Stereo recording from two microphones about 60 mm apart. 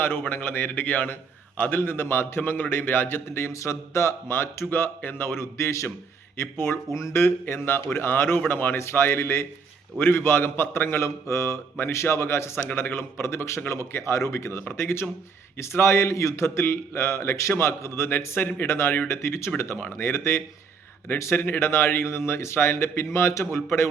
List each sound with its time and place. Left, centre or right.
0.0 s a man's voice: left
4.9 s a man's voice: left
12.7 s a man's voice: left
14.7 s a man's voice: left